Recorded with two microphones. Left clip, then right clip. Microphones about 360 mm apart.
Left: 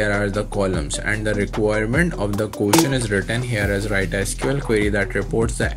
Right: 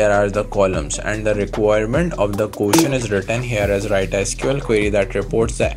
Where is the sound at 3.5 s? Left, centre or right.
Right.